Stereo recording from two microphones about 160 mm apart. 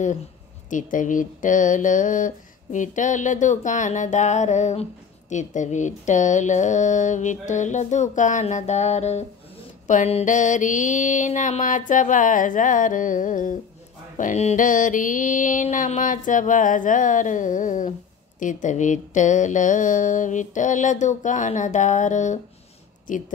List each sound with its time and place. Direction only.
0.7 s a woman's voice: 55° left (ahead or behind)